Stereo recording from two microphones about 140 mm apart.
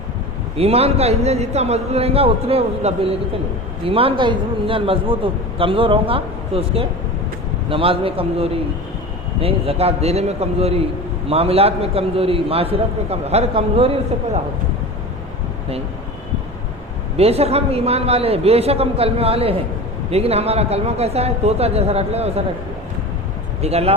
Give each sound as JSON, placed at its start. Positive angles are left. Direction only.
{"t": 0.5, "sound": "a man's voice", "side_deg": -45}
{"t": 17.2, "sound": "a man's voice", "side_deg": -45}
{"t": 23.6, "sound": "a man's voice", "side_deg": -50}